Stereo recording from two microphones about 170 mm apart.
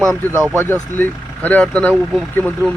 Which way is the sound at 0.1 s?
15° right (ahead or behind).